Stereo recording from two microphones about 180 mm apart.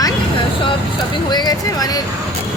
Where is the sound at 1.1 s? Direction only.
25° left (ahead or behind).